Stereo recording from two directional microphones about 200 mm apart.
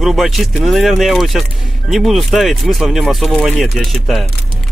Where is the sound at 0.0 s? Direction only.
Centre (ahead or behind).